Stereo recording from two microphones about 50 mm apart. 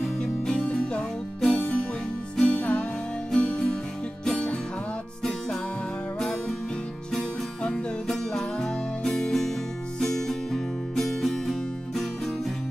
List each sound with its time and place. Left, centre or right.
0.9 s music: centre
8.1 s music: centre